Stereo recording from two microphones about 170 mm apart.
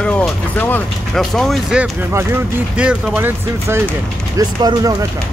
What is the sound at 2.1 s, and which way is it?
Speech, 10° right (ahead or behind).